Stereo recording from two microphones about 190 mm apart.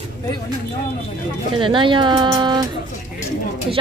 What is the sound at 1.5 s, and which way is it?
A woman's voice, 25° right (ahead or behind).